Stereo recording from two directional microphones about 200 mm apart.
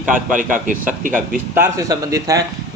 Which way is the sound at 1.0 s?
40° right (ahead or behind).